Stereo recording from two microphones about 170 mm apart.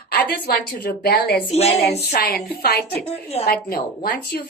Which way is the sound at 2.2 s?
65° left (ahead or behind).